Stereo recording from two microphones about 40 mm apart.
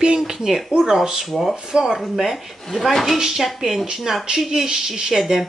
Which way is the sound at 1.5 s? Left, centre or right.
Centre.